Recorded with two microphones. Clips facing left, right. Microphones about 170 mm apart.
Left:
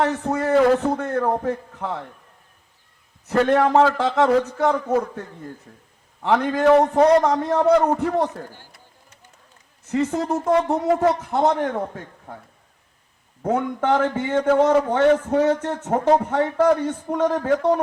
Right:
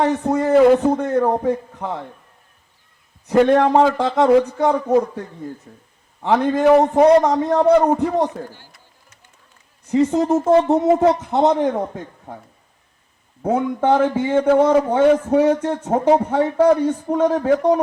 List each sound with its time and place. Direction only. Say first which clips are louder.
0.0 s a man's voice: right 4 dB; 15° right (ahead or behind)
3.2 s a man's voice: right 4 dB; 15° right (ahead or behind)
7.2 s a man's voice: right 3 dB; centre (ahead or behind)
7.6 s a man's voice: right 3 dB; 15° right (ahead or behind)
9.9 s a man's voice: right 6 dB; 15° right (ahead or behind)
13.4 s a man's voice: right 3 dB; 10° right (ahead or behind)